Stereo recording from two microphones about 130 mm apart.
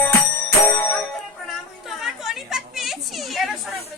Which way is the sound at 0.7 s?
15° left (ahead or behind).